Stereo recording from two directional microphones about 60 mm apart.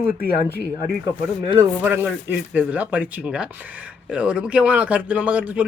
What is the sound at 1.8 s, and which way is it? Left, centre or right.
Speech, right.